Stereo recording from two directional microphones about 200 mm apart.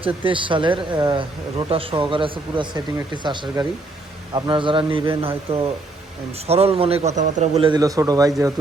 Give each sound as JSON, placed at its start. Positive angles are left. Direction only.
{"t": 0.0, "sound": "a man's voice", "side_deg": -25}
{"t": 7.7, "sound": "speech", "side_deg": -15}